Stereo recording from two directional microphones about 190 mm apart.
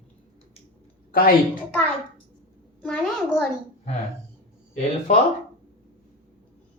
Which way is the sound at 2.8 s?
5° left (ahead or behind).